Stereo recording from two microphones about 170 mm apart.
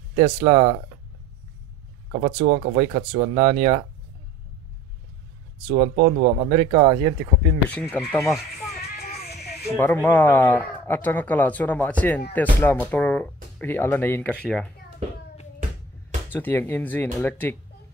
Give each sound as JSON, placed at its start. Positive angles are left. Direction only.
{"t": 0.2, "sound": "speech", "side_deg": -35}
{"t": 2.1, "sound": "speech", "side_deg": -50}
{"t": 2.7, "sound": "speech", "side_deg": -35}
{"t": 5.8, "sound": "speech", "side_deg": -45}
{"t": 6.5, "sound": "speech", "side_deg": -30}
{"t": 7.7, "sound": "speech", "side_deg": 10}
{"t": 8.8, "sound": "music", "side_deg": 65}
{"t": 9.8, "sound": "speech", "side_deg": 10}
{"t": 16.3, "sound": "speech", "side_deg": 10}